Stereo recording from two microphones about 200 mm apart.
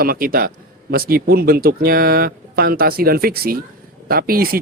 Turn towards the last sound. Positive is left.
turn(degrees=-50)  # may be behind; listen again after turning